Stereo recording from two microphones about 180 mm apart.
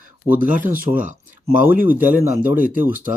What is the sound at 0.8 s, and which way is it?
Speech, 50° right (ahead or behind).